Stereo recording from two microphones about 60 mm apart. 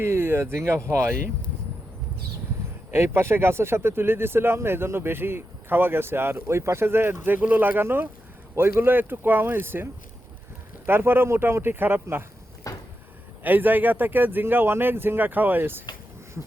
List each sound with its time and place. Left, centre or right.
0.0 s speech: right
2.9 s speech: right
12.7 s a sound: left
13.4 s speech: right